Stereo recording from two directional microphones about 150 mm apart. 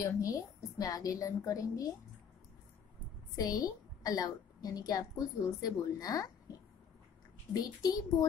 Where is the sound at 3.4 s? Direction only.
25° left (ahead or behind).